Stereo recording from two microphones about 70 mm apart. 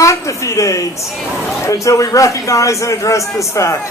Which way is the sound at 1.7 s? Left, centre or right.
Left.